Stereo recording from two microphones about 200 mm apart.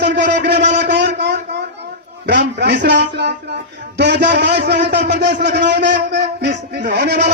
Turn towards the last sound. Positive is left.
turn(degrees=-60)  # may be behind; listen again after turning